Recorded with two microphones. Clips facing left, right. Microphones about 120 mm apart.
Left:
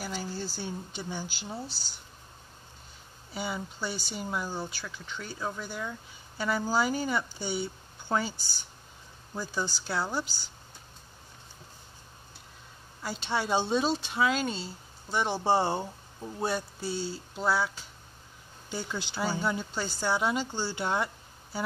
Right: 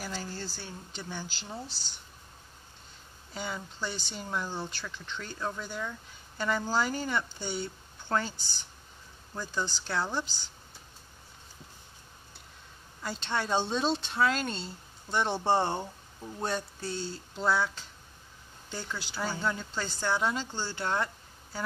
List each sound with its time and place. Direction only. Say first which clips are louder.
0.1 s speech: left 3 dB; 10° left (ahead or behind)
3.3 s speech: left 2 dB; 10° left (ahead or behind)
13.0 s speech: left 1 dB; 5° left (ahead or behind)
18.9 s speech: left 3 dB; 25° left (ahead or behind)
19.4 s speech: left 2 dB; 10° left (ahead or behind)